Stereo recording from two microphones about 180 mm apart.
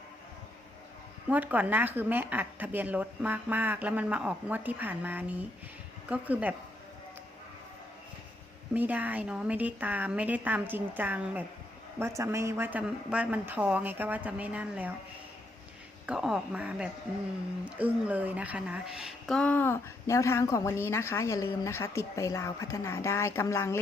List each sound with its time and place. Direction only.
1.3 s speech: 10° right (ahead or behind)
8.7 s speech: 10° right (ahead or behind)
16.0 s a woman's voice: 5° right (ahead or behind); by 23.8 s 15° left (ahead or behind)